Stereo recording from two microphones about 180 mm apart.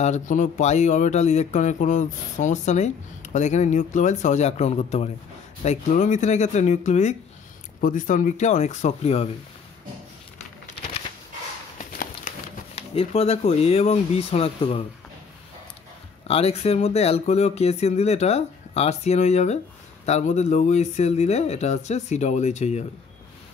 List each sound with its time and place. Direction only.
0.0 s speech: 45° left (ahead or behind)
11.8 s a sound: 45° left (ahead or behind)
12.7 s speech: 35° left (ahead or behind)
16.3 s speech: 35° left (ahead or behind)